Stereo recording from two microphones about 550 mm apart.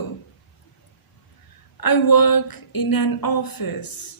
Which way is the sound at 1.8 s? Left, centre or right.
Left.